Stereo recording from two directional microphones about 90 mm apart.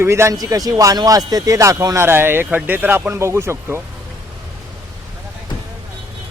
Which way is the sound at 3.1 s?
30° right (ahead or behind).